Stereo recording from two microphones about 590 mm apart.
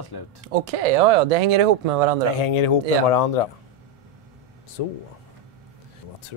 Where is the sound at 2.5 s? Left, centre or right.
Left.